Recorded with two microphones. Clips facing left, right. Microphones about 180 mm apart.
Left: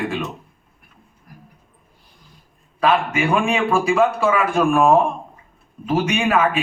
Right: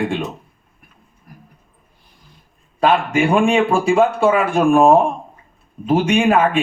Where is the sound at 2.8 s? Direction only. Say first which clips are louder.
Right 3 dB; 30° right (ahead or behind).